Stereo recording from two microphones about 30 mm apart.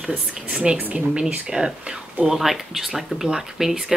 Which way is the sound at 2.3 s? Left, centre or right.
Centre.